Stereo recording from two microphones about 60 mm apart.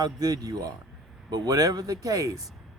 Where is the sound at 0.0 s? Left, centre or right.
Right.